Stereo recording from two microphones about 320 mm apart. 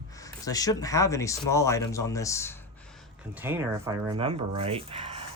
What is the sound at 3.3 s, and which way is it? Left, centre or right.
Speech, centre.